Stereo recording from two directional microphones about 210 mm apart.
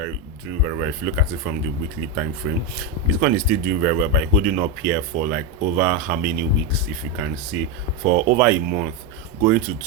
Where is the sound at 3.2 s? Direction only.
45° right (ahead or behind).